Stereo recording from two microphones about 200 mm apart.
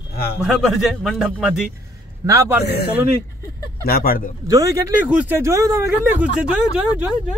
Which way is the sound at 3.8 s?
50° left (ahead or behind).